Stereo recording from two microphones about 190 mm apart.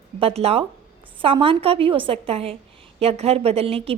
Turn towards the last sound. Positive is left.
turn(degrees=-30)  # may be behind; listen again after turning